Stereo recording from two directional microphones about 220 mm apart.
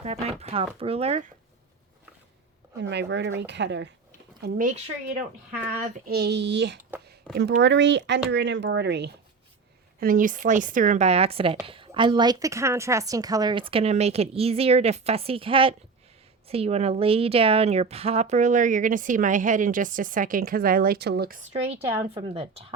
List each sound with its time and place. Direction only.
0.0 s a woman's voice: 30° right (ahead or behind)
2.8 s a woman's voice: 50° right (ahead or behind)
6.1 s speech: 50° right (ahead or behind)
7.3 s speech: 5° left (ahead or behind)
7.6 s speech: 55° right (ahead or behind)
10.0 s a woman's voice: 40° right (ahead or behind)
21.5 s a woman's voice: 25° right (ahead or behind)